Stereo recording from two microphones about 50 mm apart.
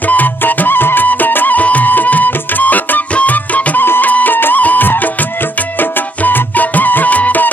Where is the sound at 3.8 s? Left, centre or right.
Left.